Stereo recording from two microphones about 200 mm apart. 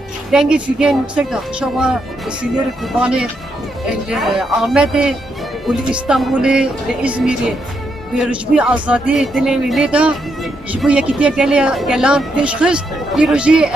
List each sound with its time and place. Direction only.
0.3 s speech: 5° right (ahead or behind)